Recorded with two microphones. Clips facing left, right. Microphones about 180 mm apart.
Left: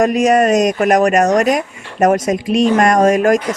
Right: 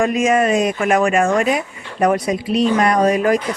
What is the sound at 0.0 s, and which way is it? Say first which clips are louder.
Speech: left 4 dB; 40° left (ahead or behind).